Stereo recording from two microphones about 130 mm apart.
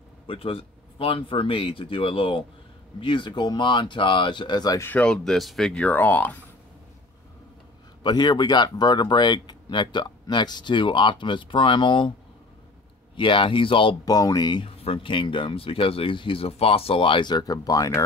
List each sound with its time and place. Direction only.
0.3 s speech: 45° left (ahead or behind)
4.7 s speech: 15° left (ahead or behind)
8.0 s speech: 35° left (ahead or behind)
13.1 s speech: 40° left (ahead or behind)
14.8 s speech: 45° left (ahead or behind); by 18.0 s 25° left (ahead or behind)